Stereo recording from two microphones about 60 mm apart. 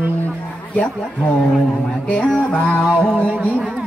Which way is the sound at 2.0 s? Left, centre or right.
Left.